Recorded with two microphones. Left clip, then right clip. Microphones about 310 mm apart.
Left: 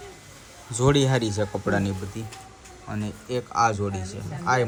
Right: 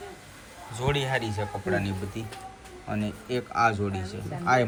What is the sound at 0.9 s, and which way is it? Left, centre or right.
Speech, centre.